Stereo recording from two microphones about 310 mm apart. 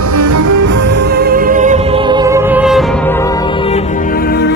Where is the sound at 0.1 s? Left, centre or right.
Right.